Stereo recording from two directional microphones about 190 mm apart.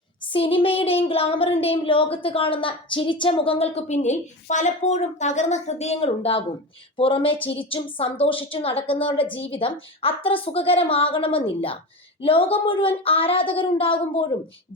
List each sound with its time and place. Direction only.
0.3 s a woman's voice: 30° left (ahead or behind)